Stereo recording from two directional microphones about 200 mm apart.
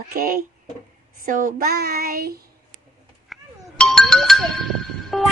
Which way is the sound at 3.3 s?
Centre (ahead or behind).